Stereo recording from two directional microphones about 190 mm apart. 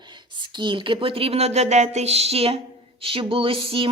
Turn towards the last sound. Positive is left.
turn(degrees=-30)  # may be behind; listen again after turning